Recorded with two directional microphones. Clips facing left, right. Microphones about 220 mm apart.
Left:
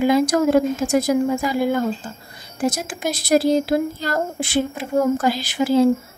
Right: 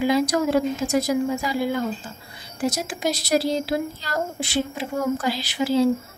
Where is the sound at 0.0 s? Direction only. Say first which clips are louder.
Left 4 dB; 50° left (ahead or behind).